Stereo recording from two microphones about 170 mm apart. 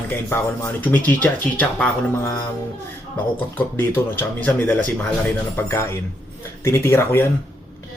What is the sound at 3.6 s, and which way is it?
Speech, 10° left (ahead or behind).